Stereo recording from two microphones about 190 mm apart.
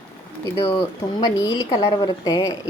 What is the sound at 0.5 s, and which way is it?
A woman's voice, 20° left (ahead or behind).